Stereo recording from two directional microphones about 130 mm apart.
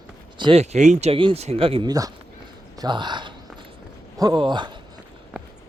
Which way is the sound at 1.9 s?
30° right (ahead or behind).